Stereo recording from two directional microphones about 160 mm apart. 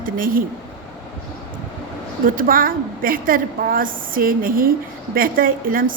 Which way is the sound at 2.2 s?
60° right (ahead or behind).